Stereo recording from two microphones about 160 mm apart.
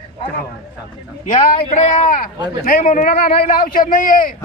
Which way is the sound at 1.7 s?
50° left (ahead or behind).